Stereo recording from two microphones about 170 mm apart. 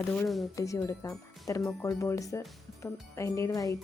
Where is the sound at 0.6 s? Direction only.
20° left (ahead or behind).